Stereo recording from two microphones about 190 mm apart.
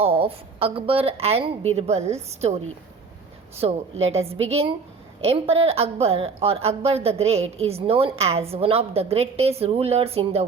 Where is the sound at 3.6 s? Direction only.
35° right (ahead or behind).